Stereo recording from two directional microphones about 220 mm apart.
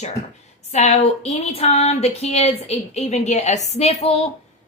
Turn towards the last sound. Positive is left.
turn(degrees=25)  # may be behind; listen again after turning